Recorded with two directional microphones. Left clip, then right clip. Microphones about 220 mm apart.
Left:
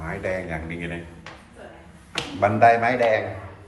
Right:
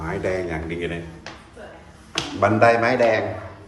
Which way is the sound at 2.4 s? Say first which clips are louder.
Even; 5° right (ahead or behind).